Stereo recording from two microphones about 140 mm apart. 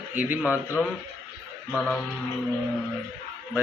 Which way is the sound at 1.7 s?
5° left (ahead or behind).